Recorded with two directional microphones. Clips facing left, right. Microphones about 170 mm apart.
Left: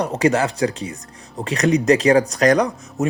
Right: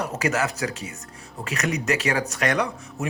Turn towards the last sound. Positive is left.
turn(degrees=40)  # may be behind; listen again after turning